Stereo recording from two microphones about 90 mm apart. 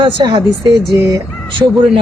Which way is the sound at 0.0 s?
60° right (ahead or behind).